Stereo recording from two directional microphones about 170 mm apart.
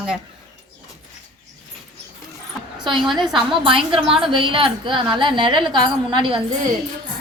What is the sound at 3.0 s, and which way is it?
Speech, centre (ahead or behind).